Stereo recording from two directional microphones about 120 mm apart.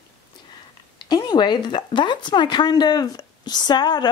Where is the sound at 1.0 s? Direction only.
35° left (ahead or behind).